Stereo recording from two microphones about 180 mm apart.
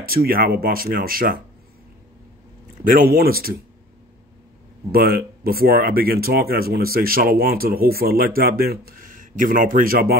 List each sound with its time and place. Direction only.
0.0 s speech: 55° right (ahead or behind)
2.8 s speech: 50° right (ahead or behind)
4.9 s speech: 55° right (ahead or behind)